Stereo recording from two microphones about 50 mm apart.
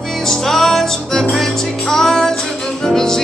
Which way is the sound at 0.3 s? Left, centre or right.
Centre.